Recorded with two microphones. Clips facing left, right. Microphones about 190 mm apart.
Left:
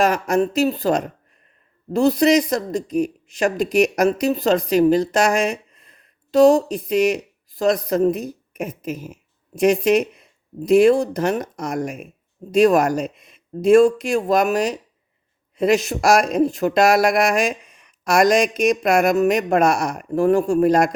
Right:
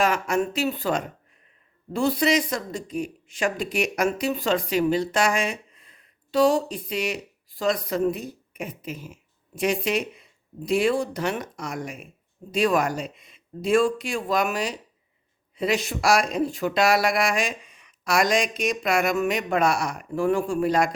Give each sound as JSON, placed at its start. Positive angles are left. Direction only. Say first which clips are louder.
{"t": 0.0, "sound": "speech", "louder": "left 5 dB", "side_deg": 40}